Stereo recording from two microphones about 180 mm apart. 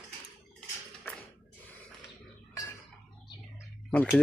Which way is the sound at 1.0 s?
15° left (ahead or behind).